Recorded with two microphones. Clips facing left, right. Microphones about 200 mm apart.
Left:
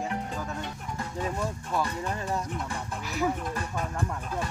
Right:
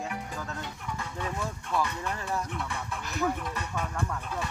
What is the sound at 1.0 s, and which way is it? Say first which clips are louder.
Music: left 4 dB; 35° left (ahead or behind).